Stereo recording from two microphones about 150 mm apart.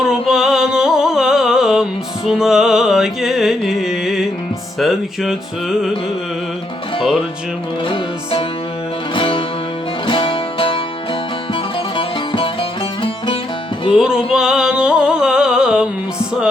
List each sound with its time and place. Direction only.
0.0 s music: 5° right (ahead or behind)
7.9 s music: 35° left (ahead or behind)
13.9 s music: 5° right (ahead or behind)